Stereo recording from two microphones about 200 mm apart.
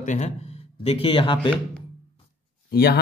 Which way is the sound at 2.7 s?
50° left (ahead or behind).